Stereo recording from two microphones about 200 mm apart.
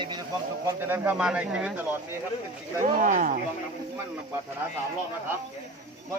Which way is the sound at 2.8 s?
40° right (ahead or behind).